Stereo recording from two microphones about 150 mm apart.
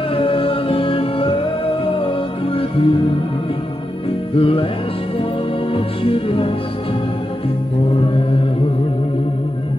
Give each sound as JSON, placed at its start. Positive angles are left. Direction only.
{"t": 0.1, "sound": "music", "side_deg": 35}
{"t": 4.4, "sound": "music", "side_deg": 40}
{"t": 5.7, "sound": "music", "side_deg": 40}
{"t": 7.9, "sound": "mantra", "side_deg": 35}